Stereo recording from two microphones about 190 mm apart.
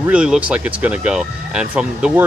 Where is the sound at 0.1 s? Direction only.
5° right (ahead or behind).